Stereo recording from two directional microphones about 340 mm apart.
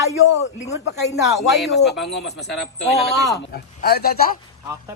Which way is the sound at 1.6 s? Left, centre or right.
Centre.